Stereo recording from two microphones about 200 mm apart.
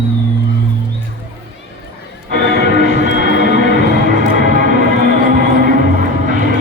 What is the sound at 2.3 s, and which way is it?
Music, 45° right (ahead or behind).